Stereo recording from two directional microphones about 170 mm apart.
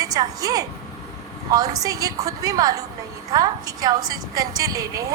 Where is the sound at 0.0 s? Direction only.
20° right (ahead or behind).